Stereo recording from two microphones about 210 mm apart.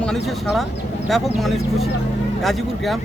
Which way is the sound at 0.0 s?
Centre (ahead or behind).